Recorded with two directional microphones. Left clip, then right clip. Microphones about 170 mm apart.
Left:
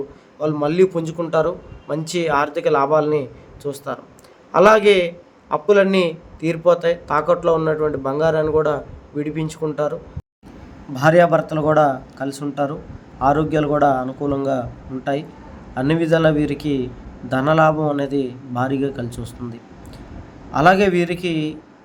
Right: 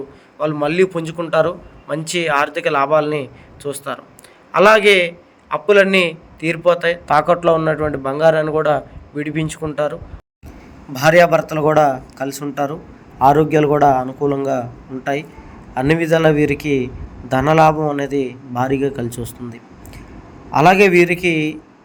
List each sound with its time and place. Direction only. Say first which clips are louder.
0.3 s a man's voice: right 1 dB; 15° right (ahead or behind)
20.5 s a man's voice: right 3 dB; 15° right (ahead or behind)